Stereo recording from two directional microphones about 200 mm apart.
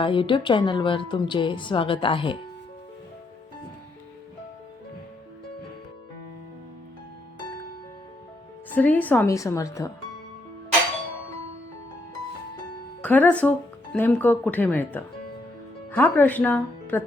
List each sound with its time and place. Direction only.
0.0 s speech: 25° left (ahead or behind)
8.7 s a woman's voice: 10° left (ahead or behind)
13.0 s a woman's voice: 10° left (ahead or behind)